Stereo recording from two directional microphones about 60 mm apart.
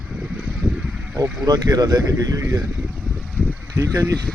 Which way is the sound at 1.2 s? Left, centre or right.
Right.